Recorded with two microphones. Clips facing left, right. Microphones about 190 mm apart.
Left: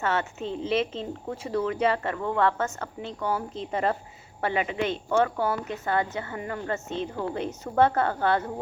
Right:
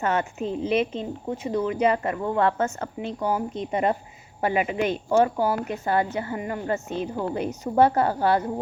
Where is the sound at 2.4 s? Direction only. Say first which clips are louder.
Right 2 dB; 15° right (ahead or behind).